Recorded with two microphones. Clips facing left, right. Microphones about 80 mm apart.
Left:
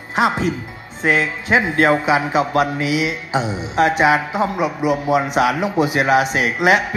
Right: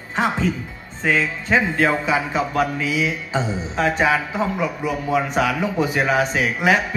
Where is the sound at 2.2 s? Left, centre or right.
Left.